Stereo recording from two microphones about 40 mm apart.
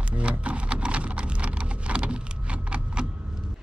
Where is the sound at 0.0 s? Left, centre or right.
Right.